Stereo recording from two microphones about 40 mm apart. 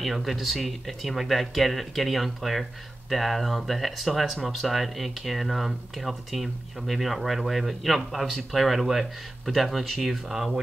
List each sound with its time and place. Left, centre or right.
0.0 s speech: centre